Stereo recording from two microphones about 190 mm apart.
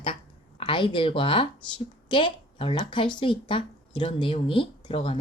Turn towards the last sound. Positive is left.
turn(degrees=30)  # may be behind; listen again after turning